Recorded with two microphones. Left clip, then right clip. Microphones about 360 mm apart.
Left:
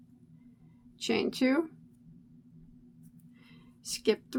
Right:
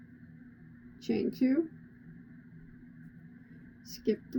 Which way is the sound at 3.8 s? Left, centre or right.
Centre.